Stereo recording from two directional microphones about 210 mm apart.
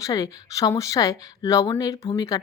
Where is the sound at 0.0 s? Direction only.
15° left (ahead or behind).